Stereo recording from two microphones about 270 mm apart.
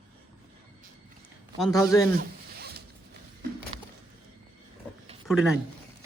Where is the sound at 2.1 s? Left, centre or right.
Right.